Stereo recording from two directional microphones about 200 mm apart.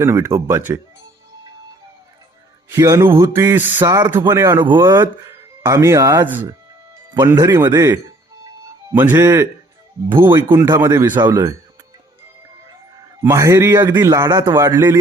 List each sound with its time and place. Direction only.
0.0 s speech: 15° right (ahead or behind)
2.7 s speech: 15° right (ahead or behind)
10.1 s speech: 25° right (ahead or behind)
10.3 s speech: 15° right (ahead or behind)
13.2 s speech: 15° right (ahead or behind)